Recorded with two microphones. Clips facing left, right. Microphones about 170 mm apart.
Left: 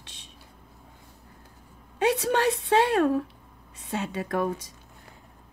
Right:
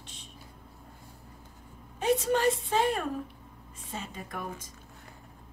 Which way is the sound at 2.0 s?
75° left (ahead or behind).